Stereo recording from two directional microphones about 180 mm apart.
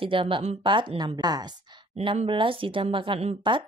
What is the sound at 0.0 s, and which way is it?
A woman's voice, 30° right (ahead or behind).